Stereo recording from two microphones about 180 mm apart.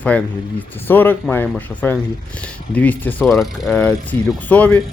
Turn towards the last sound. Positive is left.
turn(degrees=10)  # may be behind; listen again after turning